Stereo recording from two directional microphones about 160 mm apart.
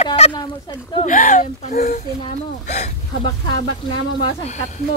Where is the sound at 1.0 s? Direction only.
55° left (ahead or behind).